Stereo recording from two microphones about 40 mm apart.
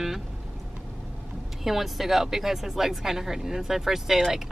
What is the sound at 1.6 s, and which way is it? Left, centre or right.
Speech, centre.